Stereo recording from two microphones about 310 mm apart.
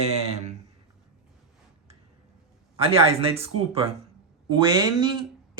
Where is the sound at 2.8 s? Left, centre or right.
Centre.